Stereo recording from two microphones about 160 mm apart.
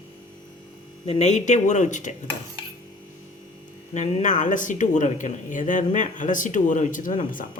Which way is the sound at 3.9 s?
45° left (ahead or behind).